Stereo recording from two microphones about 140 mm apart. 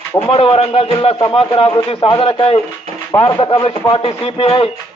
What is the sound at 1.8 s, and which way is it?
Speech, 40° left (ahead or behind).